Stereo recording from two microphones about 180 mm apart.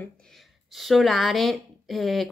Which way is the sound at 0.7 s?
Centre (ahead or behind).